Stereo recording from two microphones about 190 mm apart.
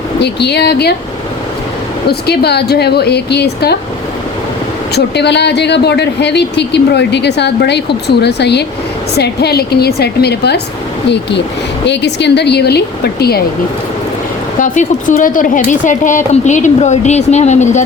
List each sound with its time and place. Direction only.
0.2 s speech: 60° left (ahead or behind)
2.0 s speech: 55° left (ahead or behind)
4.9 s speech: 60° left (ahead or behind)
14.6 s a woman's voice: 45° left (ahead or behind)